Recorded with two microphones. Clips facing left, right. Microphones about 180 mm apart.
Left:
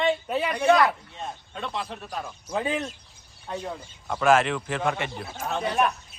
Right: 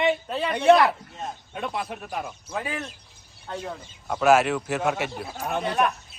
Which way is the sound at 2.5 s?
20° left (ahead or behind).